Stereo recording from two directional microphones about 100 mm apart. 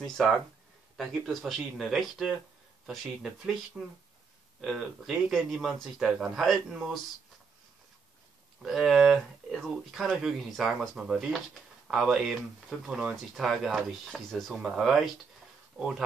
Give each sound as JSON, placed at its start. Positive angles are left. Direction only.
{"t": 0.2, "sound": "speech", "side_deg": 5}
{"t": 8.6, "sound": "speech", "side_deg": 0}